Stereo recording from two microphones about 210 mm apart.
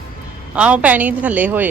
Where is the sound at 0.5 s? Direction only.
5° right (ahead or behind).